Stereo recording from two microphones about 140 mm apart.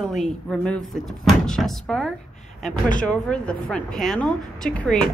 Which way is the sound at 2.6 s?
70° left (ahead or behind).